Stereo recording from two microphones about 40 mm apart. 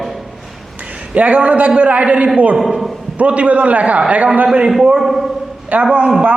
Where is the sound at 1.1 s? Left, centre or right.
Right.